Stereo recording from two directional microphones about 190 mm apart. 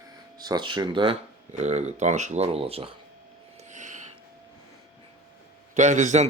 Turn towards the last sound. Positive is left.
turn(degrees=-40)  # may be behind; listen again after turning